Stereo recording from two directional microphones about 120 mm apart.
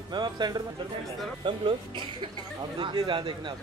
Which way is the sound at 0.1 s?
35° right (ahead or behind).